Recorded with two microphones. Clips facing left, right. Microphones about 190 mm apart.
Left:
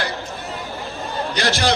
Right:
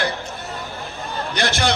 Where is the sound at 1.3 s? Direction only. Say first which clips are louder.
Left 1 dB; 55° right (ahead or behind).